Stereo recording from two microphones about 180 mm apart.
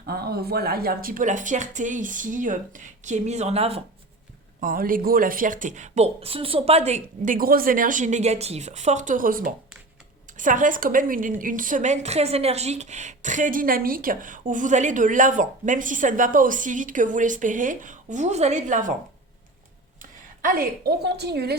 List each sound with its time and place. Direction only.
0.0 s a woman's voice: 60° right (ahead or behind); by 3.8 s 35° right (ahead or behind)
4.6 s a woman's voice: 50° right (ahead or behind)
20.0 s speech: 50° right (ahead or behind)